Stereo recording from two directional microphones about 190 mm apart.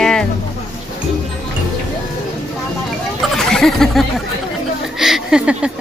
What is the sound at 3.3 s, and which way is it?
A woman's voice, centre (ahead or behind).